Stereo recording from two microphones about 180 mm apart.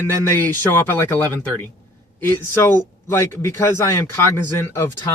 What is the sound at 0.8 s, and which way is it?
Speech, 10° left (ahead or behind).